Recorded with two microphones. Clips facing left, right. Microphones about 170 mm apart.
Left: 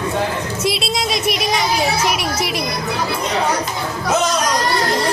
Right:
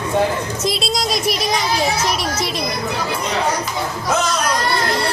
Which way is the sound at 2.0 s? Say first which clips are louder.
Left 1 dB; 30° right (ahead or behind).